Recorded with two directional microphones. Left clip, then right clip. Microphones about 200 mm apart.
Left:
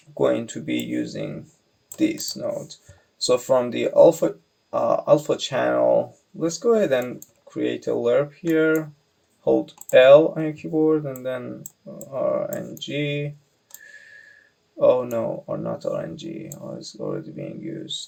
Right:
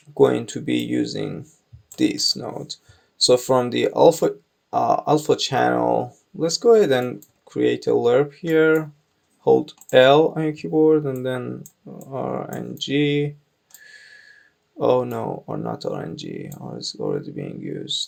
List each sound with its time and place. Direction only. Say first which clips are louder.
0.2 s speech: right 4 dB; 45° right (ahead or behind)
12.8 s speech: right 7 dB; 50° right (ahead or behind)
14.8 s speech: left 1 dB; 45° right (ahead or behind)